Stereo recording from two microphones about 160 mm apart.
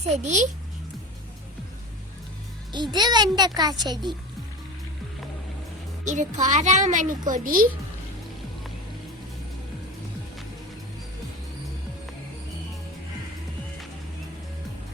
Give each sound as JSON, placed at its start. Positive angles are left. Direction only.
{"t": 0.1, "sound": "a woman's voice", "side_deg": -50}
{"t": 2.7, "sound": "a child's voice", "side_deg": -25}
{"t": 6.1, "sound": "a woman's voice", "side_deg": -50}